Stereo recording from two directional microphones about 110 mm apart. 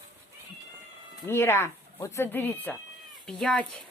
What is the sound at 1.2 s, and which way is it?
Speech, 25° left (ahead or behind).